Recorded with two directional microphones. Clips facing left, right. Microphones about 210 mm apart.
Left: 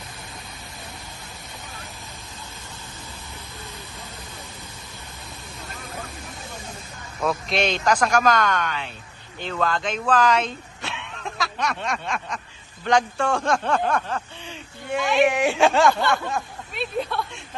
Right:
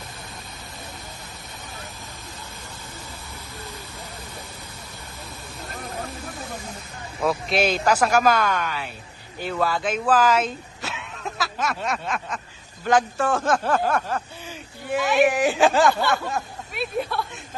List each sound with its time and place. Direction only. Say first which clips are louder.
5.7 s vehicle: right 5 dB; 50° right (ahead or behind)
7.2 s speech: right 1 dB; 5° right (ahead or behind)